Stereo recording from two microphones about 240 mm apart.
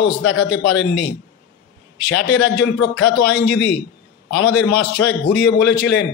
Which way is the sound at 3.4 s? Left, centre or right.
Left.